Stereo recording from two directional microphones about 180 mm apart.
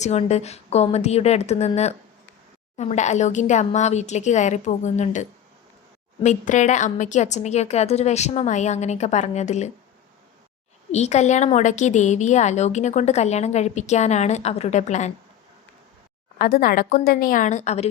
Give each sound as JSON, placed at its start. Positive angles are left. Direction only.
{"t": 0.0, "sound": "a woman's voice", "side_deg": 35}
{"t": 10.9, "sound": "a woman's voice", "side_deg": 40}
{"t": 16.4, "sound": "a woman's voice", "side_deg": 50}